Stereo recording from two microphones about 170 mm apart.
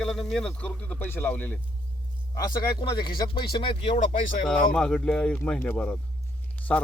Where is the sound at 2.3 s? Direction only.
25° left (ahead or behind).